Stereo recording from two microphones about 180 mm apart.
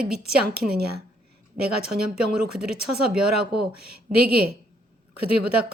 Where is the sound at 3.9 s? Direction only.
60° right (ahead or behind).